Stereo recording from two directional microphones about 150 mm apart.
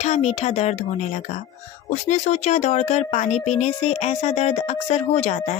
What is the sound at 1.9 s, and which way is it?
Speech, 55° left (ahead or behind).